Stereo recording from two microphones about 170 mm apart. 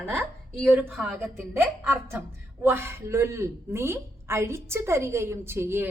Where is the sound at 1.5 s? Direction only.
15° right (ahead or behind).